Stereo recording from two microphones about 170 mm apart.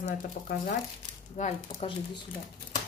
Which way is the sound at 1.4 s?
45° left (ahead or behind).